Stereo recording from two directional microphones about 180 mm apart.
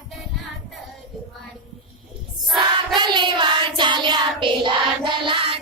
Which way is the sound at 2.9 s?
25° right (ahead or behind).